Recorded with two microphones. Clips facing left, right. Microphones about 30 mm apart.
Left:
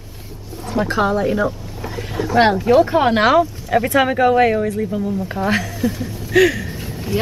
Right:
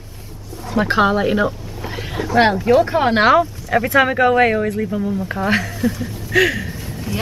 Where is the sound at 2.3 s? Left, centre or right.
Centre.